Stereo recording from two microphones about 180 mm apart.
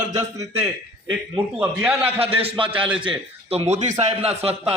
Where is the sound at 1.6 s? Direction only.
10° right (ahead or behind).